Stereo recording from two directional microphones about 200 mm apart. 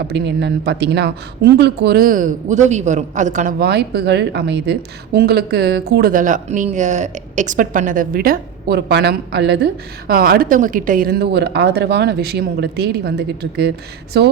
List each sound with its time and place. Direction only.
0.1 s speech: 55° right (ahead or behind)